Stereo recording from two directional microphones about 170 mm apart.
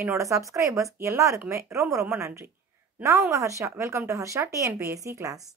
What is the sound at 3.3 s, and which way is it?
Speech, 15° right (ahead or behind).